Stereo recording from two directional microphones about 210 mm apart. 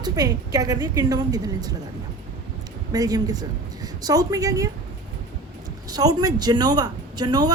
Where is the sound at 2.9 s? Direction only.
15° right (ahead or behind).